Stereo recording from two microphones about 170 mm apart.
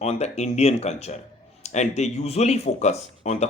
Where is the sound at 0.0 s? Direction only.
40° left (ahead or behind).